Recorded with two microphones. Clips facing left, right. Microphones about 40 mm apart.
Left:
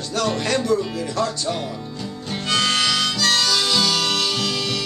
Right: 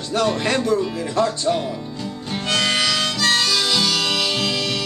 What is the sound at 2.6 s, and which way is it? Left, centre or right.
Harmonica, right.